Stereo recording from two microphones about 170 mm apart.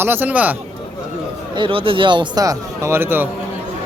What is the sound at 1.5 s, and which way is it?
Speech, 30° right (ahead or behind).